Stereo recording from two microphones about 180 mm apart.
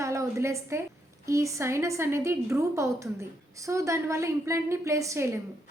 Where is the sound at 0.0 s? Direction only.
15° right (ahead or behind).